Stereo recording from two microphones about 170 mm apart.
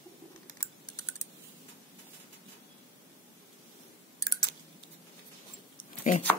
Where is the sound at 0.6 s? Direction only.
20° left (ahead or behind).